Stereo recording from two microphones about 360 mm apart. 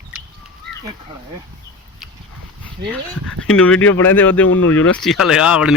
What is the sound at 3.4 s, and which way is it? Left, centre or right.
Speech, left.